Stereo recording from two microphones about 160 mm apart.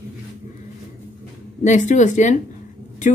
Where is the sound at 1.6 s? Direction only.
50° left (ahead or behind).